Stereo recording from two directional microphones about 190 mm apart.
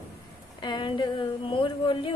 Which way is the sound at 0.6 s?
25° left (ahead or behind).